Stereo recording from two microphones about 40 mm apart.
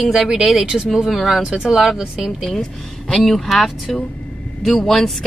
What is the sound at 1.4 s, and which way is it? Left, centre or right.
Speech, centre.